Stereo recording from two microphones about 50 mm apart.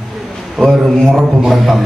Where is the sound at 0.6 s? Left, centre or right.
Centre.